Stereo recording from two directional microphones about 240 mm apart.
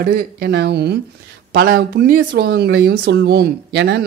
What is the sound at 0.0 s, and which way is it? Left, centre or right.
Speech, right.